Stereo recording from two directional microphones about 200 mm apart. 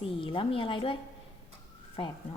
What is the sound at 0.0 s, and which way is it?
Speech, 25° left (ahead or behind).